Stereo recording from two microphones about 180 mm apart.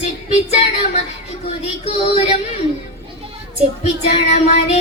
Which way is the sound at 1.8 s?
35° left (ahead or behind).